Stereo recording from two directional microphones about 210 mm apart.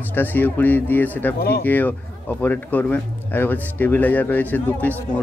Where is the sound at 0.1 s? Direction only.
10° left (ahead or behind).